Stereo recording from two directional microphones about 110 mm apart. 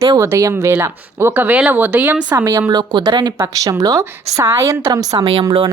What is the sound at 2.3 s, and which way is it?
A woman's voice, 30° right (ahead or behind).